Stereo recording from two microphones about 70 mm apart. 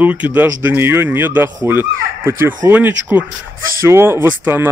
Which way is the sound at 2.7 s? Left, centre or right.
Right.